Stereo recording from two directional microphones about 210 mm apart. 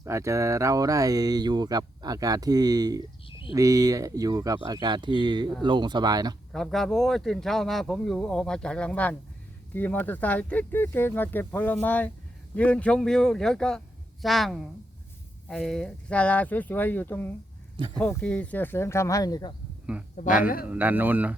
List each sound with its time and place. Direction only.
0.0 s speech: 15° right (ahead or behind)
6.5 s speech: centre (ahead or behind); by 19.5 s 20° left (ahead or behind)
20.1 s speech: 40° left (ahead or behind)
20.7 s speech: 10° right (ahead or behind)